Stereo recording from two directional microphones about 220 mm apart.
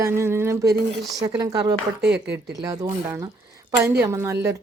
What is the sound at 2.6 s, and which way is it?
Speech, 15° right (ahead or behind).